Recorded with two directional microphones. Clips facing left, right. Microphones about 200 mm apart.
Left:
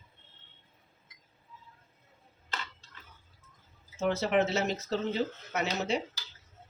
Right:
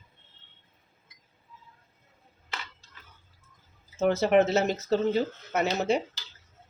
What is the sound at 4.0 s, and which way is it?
Speech, 45° right (ahead or behind).